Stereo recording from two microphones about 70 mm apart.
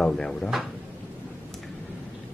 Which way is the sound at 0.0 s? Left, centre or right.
Centre.